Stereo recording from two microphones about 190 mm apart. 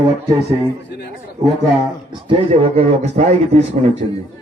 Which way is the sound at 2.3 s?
30° right (ahead or behind).